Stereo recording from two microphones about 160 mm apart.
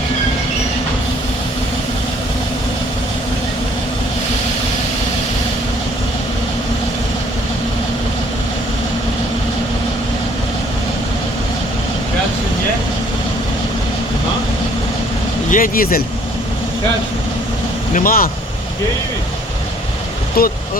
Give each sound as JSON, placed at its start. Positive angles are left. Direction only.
{"t": 15.4, "sound": "speech", "side_deg": 60}
{"t": 17.9, "sound": "speech", "side_deg": 60}
{"t": 20.4, "sound": "speech", "side_deg": 70}